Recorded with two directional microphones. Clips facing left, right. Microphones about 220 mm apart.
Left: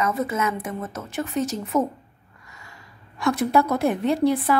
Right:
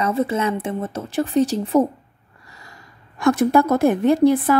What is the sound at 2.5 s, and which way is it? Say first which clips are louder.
Gasp: right 2 dB; 35° right (ahead or behind).